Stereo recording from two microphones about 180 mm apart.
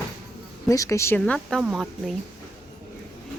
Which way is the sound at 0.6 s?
20° left (ahead or behind).